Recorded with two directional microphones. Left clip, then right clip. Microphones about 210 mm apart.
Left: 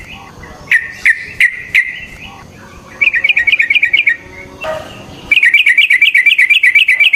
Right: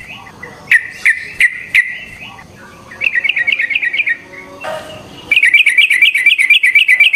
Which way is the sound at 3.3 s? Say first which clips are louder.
Left 4 dB; 25° left (ahead or behind).